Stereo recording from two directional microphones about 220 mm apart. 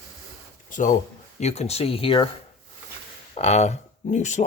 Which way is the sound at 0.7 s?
35° left (ahead or behind).